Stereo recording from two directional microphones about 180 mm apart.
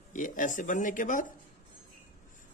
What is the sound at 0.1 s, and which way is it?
Speech, 45° left (ahead or behind).